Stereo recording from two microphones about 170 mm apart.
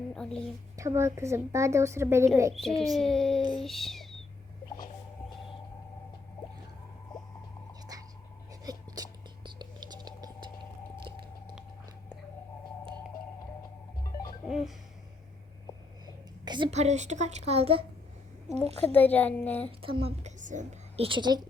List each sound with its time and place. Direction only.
0.2 s a child's voice: 5° left (ahead or behind)
0.8 s a woman's voice: 15° right (ahead or behind)
2.5 s a child's voice: centre (ahead or behind)
7.1 s a sound: centre (ahead or behind)
7.9 s a sound: 20° right (ahead or behind)
14.4 s music: centre (ahead or behind)
16.4 s a sound: 25° right (ahead or behind)
16.7 s speech: 40° right (ahead or behind)
18.8 s a woman's voice: 10° left (ahead or behind)
19.8 s a woman's voice: 35° right (ahead or behind)